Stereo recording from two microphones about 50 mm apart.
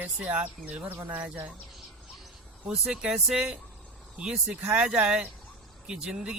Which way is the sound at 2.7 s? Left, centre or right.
Centre.